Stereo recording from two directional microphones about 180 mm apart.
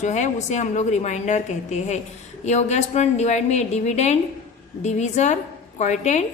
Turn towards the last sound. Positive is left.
turn(degrees=40)  # may be behind; listen again after turning